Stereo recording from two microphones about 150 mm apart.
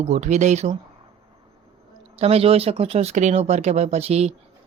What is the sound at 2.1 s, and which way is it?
Speech, 40° right (ahead or behind).